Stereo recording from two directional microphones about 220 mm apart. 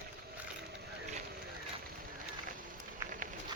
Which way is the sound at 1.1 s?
40° right (ahead or behind).